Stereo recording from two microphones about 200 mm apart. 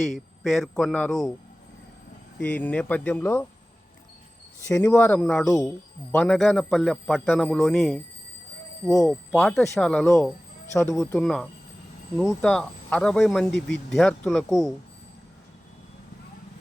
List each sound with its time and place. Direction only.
0.0 s speech: centre (ahead or behind)
2.4 s speech: 5° left (ahead or behind)
4.6 s speech: 15° left (ahead or behind)
8.9 s speech: 15° left (ahead or behind)
9.3 s speech: 5° left (ahead or behind)
10.9 s speech: 5° left (ahead or behind)